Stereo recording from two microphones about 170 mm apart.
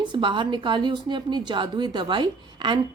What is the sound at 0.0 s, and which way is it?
A woman's voice, 30° right (ahead or behind).